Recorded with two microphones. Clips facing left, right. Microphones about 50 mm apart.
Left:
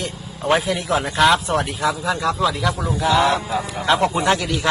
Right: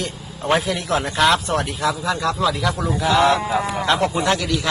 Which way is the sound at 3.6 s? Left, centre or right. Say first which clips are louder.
Right 5 dB; right.